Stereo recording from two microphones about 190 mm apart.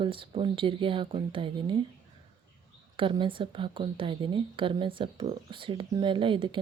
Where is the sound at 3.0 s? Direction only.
25° right (ahead or behind).